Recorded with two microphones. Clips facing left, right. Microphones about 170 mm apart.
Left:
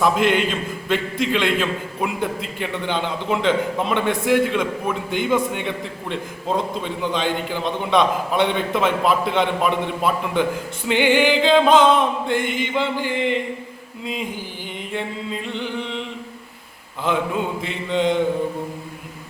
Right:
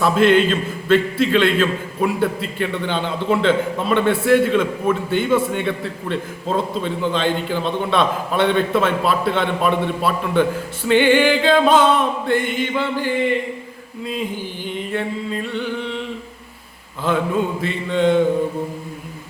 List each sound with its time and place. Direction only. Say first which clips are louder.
0.0 s a man's voice: right 4 dB; 15° left (ahead or behind)
17.6 s a man's voice: right 3 dB; 15° left (ahead or behind)